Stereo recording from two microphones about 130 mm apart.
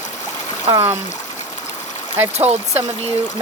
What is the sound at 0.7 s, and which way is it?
Speech, 20° right (ahead or behind).